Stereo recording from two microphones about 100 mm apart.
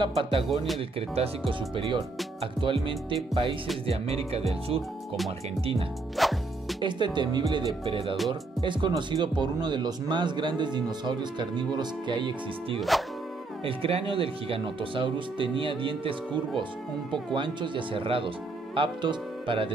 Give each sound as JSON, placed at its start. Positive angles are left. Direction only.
{"t": 0.0, "sound": "speech", "side_deg": -60}
{"t": 0.7, "sound": "speech", "side_deg": -75}
{"t": 1.5, "sound": "speech", "side_deg": -55}
{"t": 3.8, "sound": "speech", "side_deg": -85}
{"t": 6.1, "sound": "music", "side_deg": 0}
{"t": 6.8, "sound": "speech", "side_deg": -50}
{"t": 7.8, "sound": "speech", "side_deg": -60}
{"t": 13.7, "sound": "speech", "side_deg": -70}
{"t": 18.8, "sound": "speech", "side_deg": -55}